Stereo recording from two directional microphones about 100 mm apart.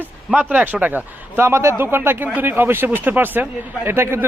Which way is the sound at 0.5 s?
15° right (ahead or behind).